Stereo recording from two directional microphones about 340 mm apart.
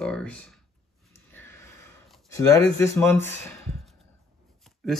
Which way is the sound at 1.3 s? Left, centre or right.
Centre.